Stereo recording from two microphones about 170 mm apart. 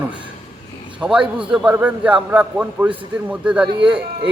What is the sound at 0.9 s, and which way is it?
A man's voice, 5° right (ahead or behind).